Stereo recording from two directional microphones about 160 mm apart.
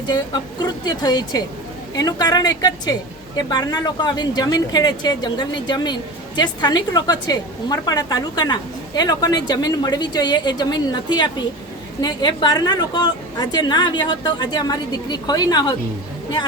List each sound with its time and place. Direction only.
0.6 s speech: 25° left (ahead or behind)